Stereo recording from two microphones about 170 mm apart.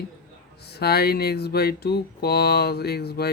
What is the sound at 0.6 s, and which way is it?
Speech, 70° left (ahead or behind).